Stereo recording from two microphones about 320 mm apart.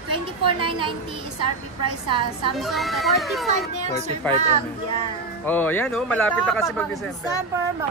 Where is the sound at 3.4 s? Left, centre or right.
Right.